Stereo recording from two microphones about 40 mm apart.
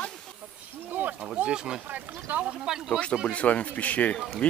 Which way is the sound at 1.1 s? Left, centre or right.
Right.